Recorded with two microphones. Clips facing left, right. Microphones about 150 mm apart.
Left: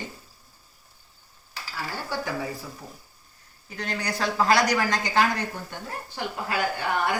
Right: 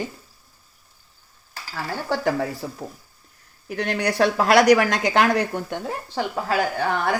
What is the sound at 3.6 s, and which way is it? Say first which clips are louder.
Speech: right 7 dB; 75° right (ahead or behind).